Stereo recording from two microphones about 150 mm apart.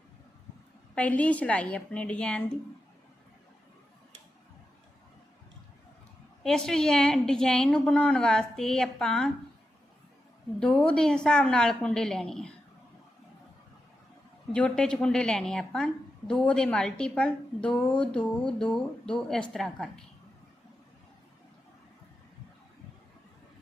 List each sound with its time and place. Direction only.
0.9 s a woman's voice: 10° left (ahead or behind)
6.4 s a woman's voice: 5° left (ahead or behind)
10.6 s a woman's voice: 5° left (ahead or behind)
14.5 s a woman's voice: 5° left (ahead or behind)